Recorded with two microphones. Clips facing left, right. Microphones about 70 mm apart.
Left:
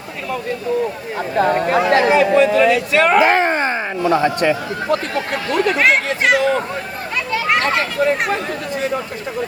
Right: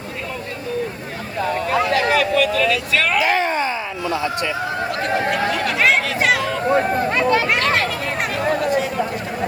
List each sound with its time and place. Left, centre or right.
1.9 s a man's voice: left
5.8 s speech: centre